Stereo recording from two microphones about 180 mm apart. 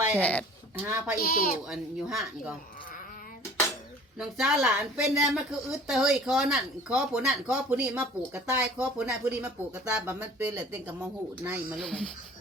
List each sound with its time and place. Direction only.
0.2 s speech: 10° left (ahead or behind)
0.8 s speech: 10° right (ahead or behind)
1.2 s speech: 55° left (ahead or behind)
1.6 s speech: centre (ahead or behind)
4.2 s speech: centre (ahead or behind)